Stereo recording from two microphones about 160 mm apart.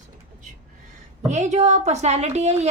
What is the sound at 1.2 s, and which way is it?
Speech, 45° right (ahead or behind).